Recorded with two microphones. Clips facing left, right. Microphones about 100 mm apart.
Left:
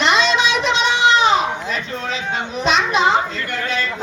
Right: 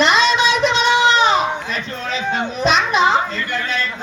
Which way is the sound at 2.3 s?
45° right (ahead or behind).